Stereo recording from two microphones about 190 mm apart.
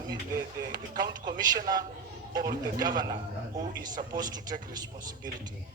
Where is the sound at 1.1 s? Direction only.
20° right (ahead or behind).